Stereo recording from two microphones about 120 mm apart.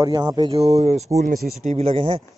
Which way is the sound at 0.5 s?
60° right (ahead or behind).